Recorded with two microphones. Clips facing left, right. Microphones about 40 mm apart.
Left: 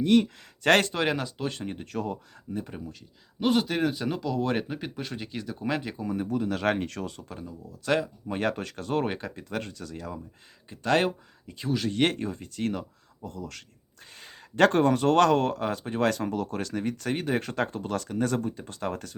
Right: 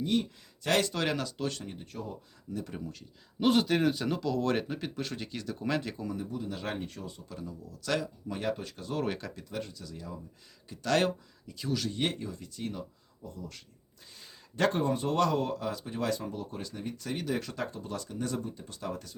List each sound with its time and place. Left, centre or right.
0.0 s speech: left
0.9 s speech: left
1.6 s speech: left
2.6 s speech: centre
6.1 s speech: left
7.7 s speech: left
8.4 s speech: left
9.0 s speech: left
9.4 s speech: left
10.7 s speech: left
11.9 s speech: left
13.2 s speech: left
14.2 s speech: left